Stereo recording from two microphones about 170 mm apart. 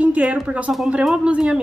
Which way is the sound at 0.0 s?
10° right (ahead or behind).